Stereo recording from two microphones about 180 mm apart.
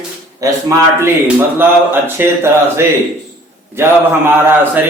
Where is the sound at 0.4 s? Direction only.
20° right (ahead or behind).